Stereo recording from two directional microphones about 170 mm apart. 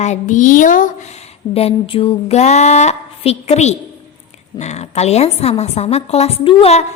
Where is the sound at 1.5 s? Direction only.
35° left (ahead or behind).